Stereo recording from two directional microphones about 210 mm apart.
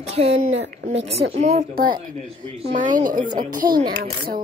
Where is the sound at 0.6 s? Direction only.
55° right (ahead or behind).